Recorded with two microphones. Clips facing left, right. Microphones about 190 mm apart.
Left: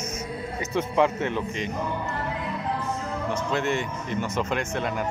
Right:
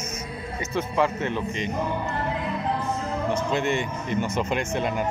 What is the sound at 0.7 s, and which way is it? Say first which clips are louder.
Speech: left 1 dB; 20° left (ahead or behind).